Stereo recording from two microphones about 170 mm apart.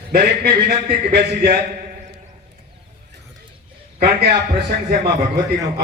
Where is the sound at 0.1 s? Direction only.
65° right (ahead or behind).